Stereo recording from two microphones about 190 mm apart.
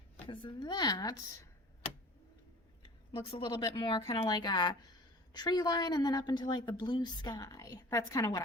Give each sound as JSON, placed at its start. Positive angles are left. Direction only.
{"t": 0.3, "sound": "a woman's voice", "side_deg": 25}
{"t": 3.2, "sound": "a woman's voice", "side_deg": 25}